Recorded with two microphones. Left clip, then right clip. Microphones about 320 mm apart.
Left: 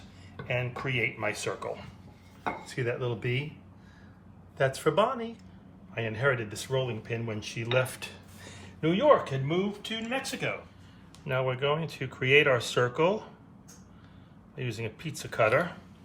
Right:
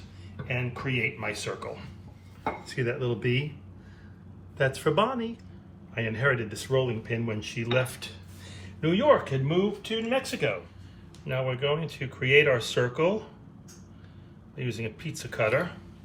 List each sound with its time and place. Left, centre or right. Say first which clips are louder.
0.4 s speech: left 1 dB; centre
4.5 s speech: right 1 dB; centre
7.8 s a sound: even; centre
9.3 s speech: right 4 dB; centre
11.3 s speech: even; centre
14.5 s speech: right 2 dB; centre